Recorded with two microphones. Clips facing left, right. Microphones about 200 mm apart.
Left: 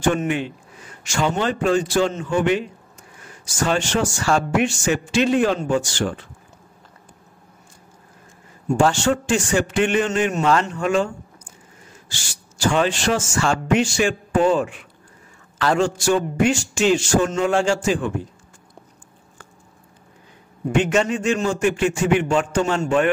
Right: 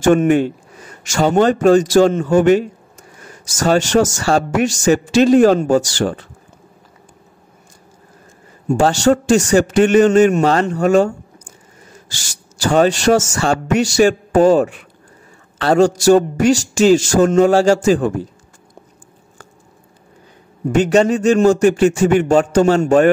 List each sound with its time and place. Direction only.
0.0 s a man's voice: 45° right (ahead or behind)
8.7 s a man's voice: 40° right (ahead or behind)
20.7 s speech: 40° right (ahead or behind)